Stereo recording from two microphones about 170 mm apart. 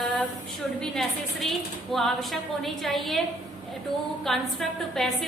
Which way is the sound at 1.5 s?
Centre (ahead or behind).